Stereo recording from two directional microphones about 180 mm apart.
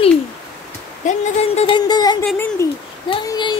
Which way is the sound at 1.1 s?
30° left (ahead or behind).